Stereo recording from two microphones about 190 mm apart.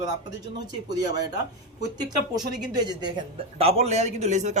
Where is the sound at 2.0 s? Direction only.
20° right (ahead or behind).